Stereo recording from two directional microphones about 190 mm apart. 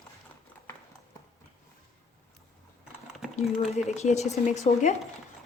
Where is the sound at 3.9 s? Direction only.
35° left (ahead or behind).